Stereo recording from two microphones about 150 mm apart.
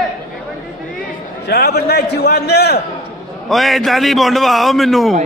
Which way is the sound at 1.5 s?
90° left.